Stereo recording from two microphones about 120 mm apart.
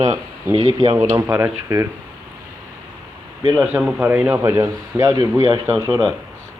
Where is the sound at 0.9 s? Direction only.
25° right (ahead or behind).